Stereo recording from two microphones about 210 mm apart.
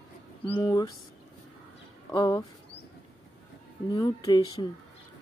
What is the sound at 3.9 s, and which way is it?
Speech, 20° left (ahead or behind).